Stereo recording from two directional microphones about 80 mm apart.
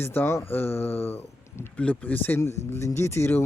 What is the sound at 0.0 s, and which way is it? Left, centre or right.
Speech, left.